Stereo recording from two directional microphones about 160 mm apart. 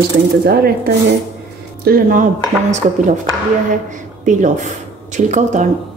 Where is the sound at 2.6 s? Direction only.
45° right (ahead or behind).